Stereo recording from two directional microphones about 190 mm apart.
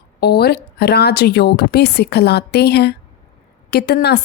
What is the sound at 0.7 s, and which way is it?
A woman's voice, 60° left (ahead or behind).